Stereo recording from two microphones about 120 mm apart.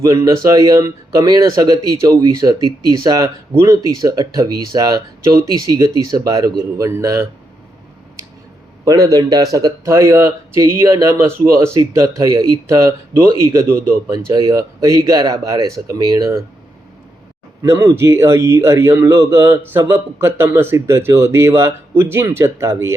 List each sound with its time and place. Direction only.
0.0 s a man's voice: 30° right (ahead or behind)
8.8 s a man's voice: 30° right (ahead or behind)
17.6 s a man's voice: 20° right (ahead or behind)